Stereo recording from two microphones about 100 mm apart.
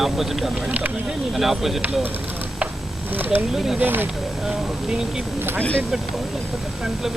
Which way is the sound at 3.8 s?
20° right (ahead or behind).